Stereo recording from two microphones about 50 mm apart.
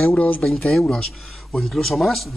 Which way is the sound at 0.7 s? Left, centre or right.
Centre.